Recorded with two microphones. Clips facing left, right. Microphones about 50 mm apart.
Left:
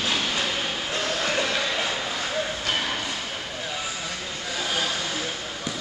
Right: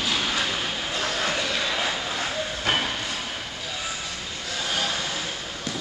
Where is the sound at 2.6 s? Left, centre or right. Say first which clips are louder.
Right 2 dB; centre.